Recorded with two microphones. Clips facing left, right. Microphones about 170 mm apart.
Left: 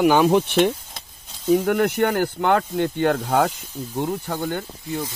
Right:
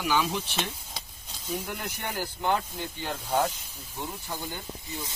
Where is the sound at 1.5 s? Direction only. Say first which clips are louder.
Left 16 dB; 75° left (ahead or behind).